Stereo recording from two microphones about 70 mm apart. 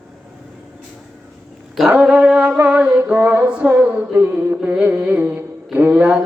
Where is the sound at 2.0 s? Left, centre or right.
Centre.